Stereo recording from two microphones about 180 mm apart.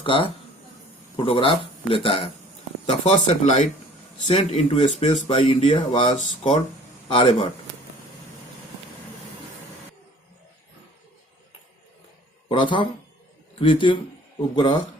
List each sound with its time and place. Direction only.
0.0 s a man's voice: 30° left (ahead or behind)
12.5 s a man's voice: 25° left (ahead or behind)